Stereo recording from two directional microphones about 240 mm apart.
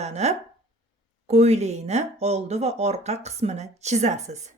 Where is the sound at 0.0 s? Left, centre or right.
Right.